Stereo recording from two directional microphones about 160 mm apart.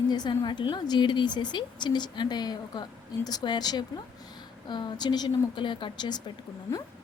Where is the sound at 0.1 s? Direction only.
30° left (ahead or behind).